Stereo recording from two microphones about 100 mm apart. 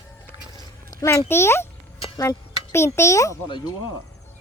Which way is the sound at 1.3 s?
25° left (ahead or behind).